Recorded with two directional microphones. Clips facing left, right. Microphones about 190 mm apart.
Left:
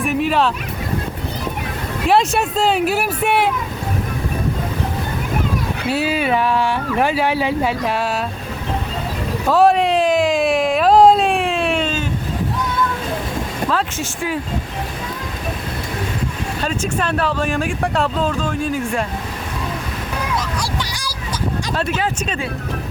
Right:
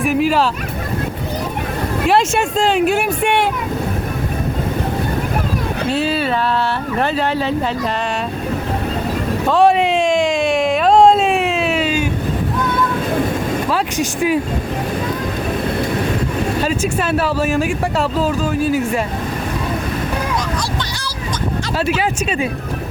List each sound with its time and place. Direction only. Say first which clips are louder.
0.0 s fowl: right 2 dB; centre (ahead or behind)
2.0 s speech: even; centre (ahead or behind)
5.9 s speech: left 1 dB; 10° left (ahead or behind)
9.5 s a sound: even; centre (ahead or behind)
13.7 s speech: right 3 dB; 15° right (ahead or behind)
16.6 s speech: right 3 dB; 5° right (ahead or behind)
21.8 s speech: right 5 dB; 10° right (ahead or behind)